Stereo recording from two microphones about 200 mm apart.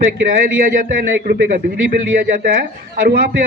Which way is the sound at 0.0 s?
45° right (ahead or behind).